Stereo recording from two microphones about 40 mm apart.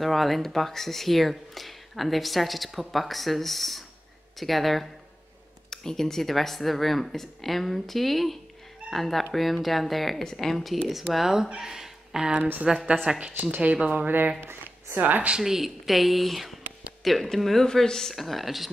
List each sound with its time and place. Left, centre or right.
0.0 s speech: centre
11.6 s a sound: centre
12.8 s speech: right
13.9 s speech: right
14.4 s a sound: right
15.0 s speech: right
15.4 s speech: centre
18.1 s speech: centre